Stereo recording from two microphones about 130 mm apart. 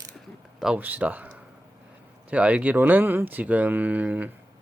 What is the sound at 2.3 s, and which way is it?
Speech, 10° right (ahead or behind).